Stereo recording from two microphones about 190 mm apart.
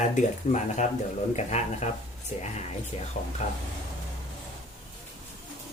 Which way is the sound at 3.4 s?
40° left (ahead or behind).